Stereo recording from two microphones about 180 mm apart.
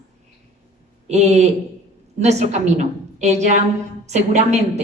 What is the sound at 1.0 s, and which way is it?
A woman's voice, 40° right (ahead or behind).